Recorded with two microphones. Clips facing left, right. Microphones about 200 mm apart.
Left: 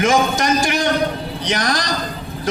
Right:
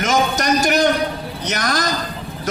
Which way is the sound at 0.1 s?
40° right (ahead or behind).